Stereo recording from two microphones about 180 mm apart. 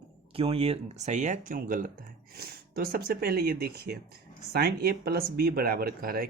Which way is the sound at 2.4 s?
55° right (ahead or behind).